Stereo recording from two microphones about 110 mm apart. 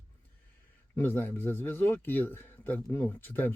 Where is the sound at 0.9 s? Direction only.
20° left (ahead or behind).